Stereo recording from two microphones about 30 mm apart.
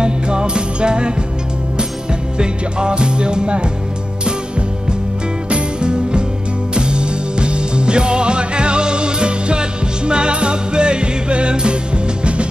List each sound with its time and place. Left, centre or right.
0.0 s music: right
2.3 s music: right
5.5 s music: right